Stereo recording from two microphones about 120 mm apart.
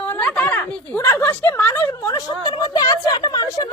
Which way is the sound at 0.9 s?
20° left (ahead or behind).